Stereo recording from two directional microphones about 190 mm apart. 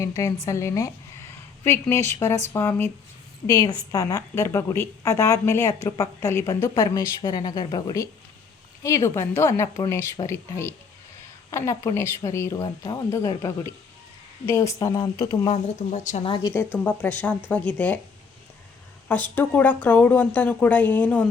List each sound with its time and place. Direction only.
0.4 s a woman's voice: 15° left (ahead or behind)
15.5 s a woman's voice: 35° left (ahead or behind); by 18.0 s 10° left (ahead or behind)
19.4 s a woman's voice: 10° left (ahead or behind)